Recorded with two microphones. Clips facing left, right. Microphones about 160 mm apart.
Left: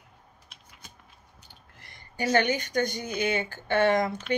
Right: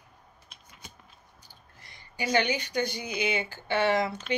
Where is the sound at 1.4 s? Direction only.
55° left (ahead or behind).